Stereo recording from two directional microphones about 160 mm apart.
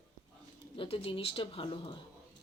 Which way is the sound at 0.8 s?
35° left (ahead or behind).